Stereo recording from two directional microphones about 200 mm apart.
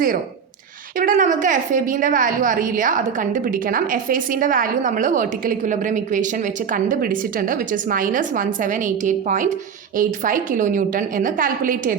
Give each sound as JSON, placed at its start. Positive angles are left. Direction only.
{"t": 0.9, "sound": "a woman's voice", "side_deg": -40}